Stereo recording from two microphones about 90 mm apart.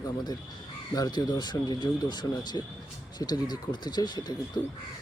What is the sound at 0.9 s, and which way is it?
Speech, 45° left (ahead or behind).